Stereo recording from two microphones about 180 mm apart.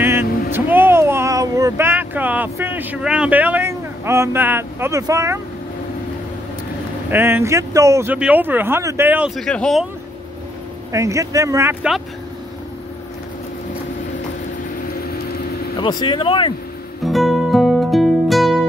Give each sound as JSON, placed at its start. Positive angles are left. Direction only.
{"t": 0.0, "sound": "vehicle", "side_deg": -10}
{"t": 7.1, "sound": "speech", "side_deg": -10}
{"t": 10.9, "sound": "speech", "side_deg": -15}
{"t": 15.8, "sound": "speech", "side_deg": 25}
{"t": 17.0, "sound": "music", "side_deg": 0}